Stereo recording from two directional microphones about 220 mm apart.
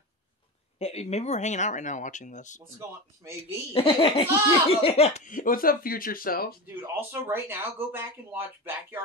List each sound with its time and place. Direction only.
0.7 s speech: 30° left (ahead or behind)
2.8 s speech: 10° right (ahead or behind)
3.7 s speech: 25° left (ahead or behind); by 6.5 s 40° left (ahead or behind)
6.6 s speech: 10° right (ahead or behind)